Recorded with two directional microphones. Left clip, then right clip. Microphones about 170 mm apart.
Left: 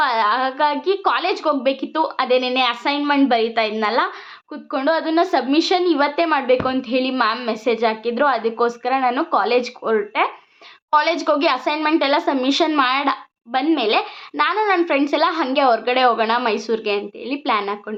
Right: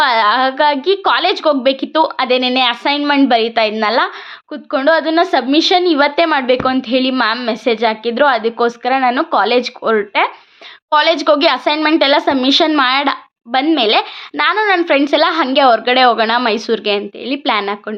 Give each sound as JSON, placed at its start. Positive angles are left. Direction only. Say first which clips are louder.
{"t": 0.0, "sound": "a woman's voice", "louder": "right 6 dB", "side_deg": -20}